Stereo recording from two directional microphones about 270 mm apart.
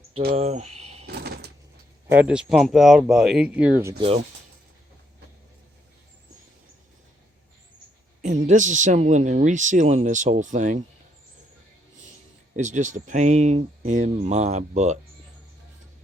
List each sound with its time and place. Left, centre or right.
0.3 s speech: right
0.8 s a sound: right
1.0 s a sound: right
2.0 s speech: centre
8.2 s speech: right
12.5 s speech: right